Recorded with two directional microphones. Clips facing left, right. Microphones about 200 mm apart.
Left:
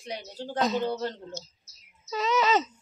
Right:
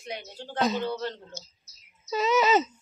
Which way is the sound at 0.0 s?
35° left (ahead or behind).